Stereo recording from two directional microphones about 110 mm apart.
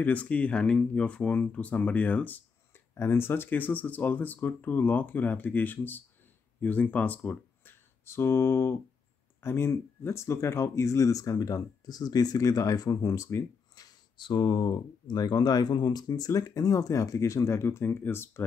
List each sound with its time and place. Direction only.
0.0 s speech: 15° left (ahead or behind)
7.2 s a sound: 20° left (ahead or behind)
9.4 s speech: 20° left (ahead or behind)